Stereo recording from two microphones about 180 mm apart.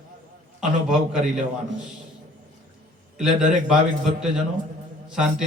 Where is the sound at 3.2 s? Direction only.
5° right (ahead or behind).